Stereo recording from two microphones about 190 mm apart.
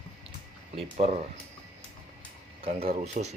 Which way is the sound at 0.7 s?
30° right (ahead or behind).